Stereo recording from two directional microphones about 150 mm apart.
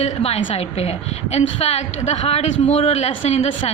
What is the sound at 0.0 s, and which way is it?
A woman's voice, 40° left (ahead or behind).